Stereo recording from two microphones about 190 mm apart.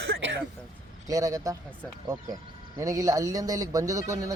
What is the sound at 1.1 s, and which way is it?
Speech, 20° right (ahead or behind).